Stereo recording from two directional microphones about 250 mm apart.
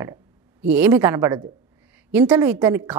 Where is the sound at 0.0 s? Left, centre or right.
Centre.